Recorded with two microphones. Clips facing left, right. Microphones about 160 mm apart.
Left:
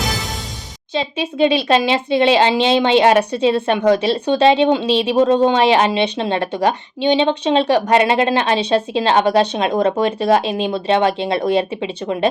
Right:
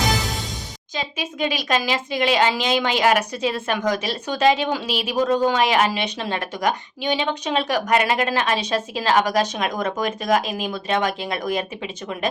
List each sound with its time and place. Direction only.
0.9 s speech: 30° left (ahead or behind)